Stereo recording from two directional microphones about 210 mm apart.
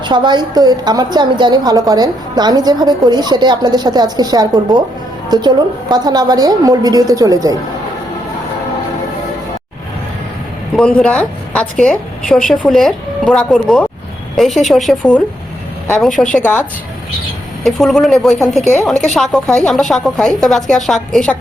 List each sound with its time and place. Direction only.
0.0 s a woman's voice: 20° right (ahead or behind)
10.8 s a woman's voice: 5° left (ahead or behind)
17.6 s a woman's voice: centre (ahead or behind)